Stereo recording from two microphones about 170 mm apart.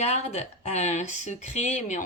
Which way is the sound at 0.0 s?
40° left (ahead or behind).